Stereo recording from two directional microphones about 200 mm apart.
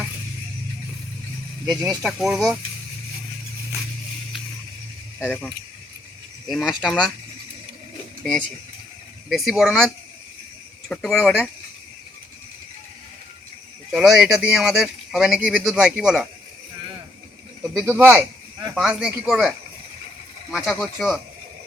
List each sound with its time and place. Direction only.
1.6 s speech: 20° right (ahead or behind)
2.0 s speech: 5° right (ahead or behind)
5.2 s speech: 5° left (ahead or behind)
9.3 s speech: centre (ahead or behind)
13.9 s speech: 5° right (ahead or behind)
17.8 s speech: 10° right (ahead or behind)